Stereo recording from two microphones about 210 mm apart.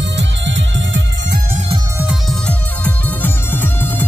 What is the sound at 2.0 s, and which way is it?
Music, 5° right (ahead or behind).